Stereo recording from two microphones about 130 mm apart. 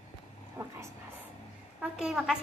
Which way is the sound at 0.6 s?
15° right (ahead or behind).